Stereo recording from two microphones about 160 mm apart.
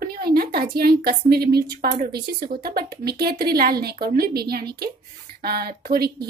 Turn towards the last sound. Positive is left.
turn(degrees=-70)  # may be behind; listen again after turning